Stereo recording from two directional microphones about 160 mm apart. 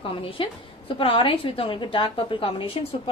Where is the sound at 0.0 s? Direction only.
35° left (ahead or behind).